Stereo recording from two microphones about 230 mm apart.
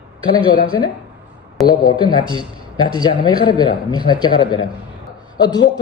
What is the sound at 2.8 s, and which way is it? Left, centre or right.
A man's voice, centre.